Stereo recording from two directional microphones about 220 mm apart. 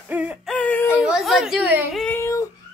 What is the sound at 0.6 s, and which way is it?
Child singing, 10° left (ahead or behind).